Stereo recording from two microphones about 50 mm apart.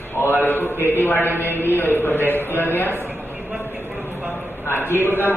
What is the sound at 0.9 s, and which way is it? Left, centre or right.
A man's voice, left.